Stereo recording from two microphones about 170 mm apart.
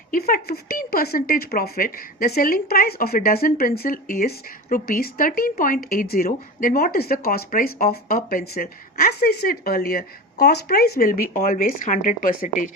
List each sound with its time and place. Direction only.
0.1 s speech: 60° left (ahead or behind)